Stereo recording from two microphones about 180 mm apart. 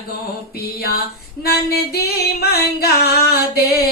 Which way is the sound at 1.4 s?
60° left (ahead or behind).